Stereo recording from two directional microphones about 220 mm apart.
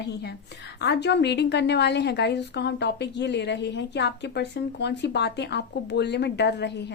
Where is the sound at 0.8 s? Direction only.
50° left (ahead or behind).